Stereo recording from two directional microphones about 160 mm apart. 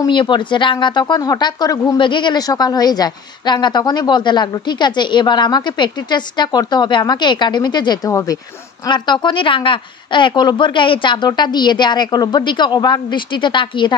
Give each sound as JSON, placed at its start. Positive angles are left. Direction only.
{"t": 0.0, "sound": "speech", "side_deg": 30}